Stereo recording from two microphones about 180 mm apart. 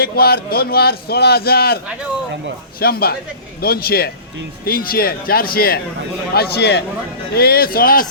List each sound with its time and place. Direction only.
0.0 s a man's voice: 55° left (ahead or behind)
2.8 s a man's voice: 60° left (ahead or behind)